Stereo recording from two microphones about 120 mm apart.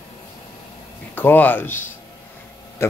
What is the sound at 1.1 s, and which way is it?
Speech, 15° left (ahead or behind).